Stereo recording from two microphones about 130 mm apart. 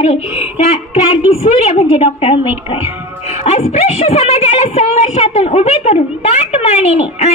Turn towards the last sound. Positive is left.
turn(degrees=50)  # may be behind; listen again after turning